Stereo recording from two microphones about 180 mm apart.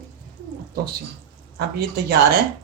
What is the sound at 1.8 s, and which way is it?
Speech, 60° right (ahead or behind).